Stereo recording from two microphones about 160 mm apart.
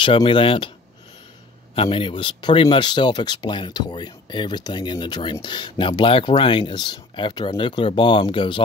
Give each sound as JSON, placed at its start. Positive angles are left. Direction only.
{"t": 0.0, "sound": "speech", "side_deg": 35}
{"t": 1.8, "sound": "speech", "side_deg": 35}